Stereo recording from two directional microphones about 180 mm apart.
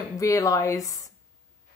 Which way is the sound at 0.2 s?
20° left (ahead or behind).